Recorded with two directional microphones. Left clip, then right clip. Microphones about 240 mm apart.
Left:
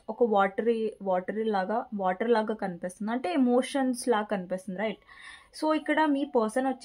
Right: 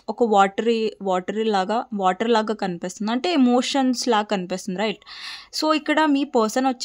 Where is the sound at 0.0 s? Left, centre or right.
Right.